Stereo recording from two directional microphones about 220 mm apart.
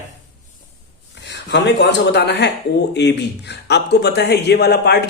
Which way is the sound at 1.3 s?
50° left (ahead or behind).